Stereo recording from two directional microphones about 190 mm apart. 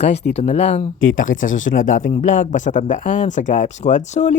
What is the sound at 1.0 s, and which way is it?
Speech, 90° left.